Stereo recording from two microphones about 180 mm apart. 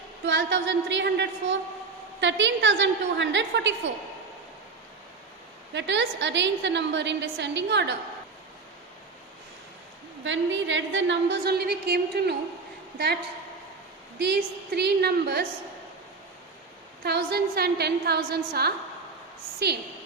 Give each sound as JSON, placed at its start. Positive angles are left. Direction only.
{"t": 0.3, "sound": "a woman's voice", "side_deg": -85}
{"t": 5.7, "sound": "a woman's voice", "side_deg": -85}
{"t": 10.2, "sound": "a woman's voice", "side_deg": -90}
{"t": 14.2, "sound": "a woman's voice", "side_deg": -65}
{"t": 17.0, "sound": "a woman's voice", "side_deg": -65}